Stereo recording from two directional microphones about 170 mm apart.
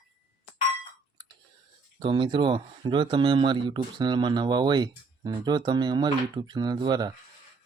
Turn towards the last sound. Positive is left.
turn(degrees=-25)  # may be behind; listen again after turning